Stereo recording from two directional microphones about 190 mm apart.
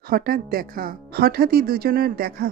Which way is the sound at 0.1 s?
50° right (ahead or behind).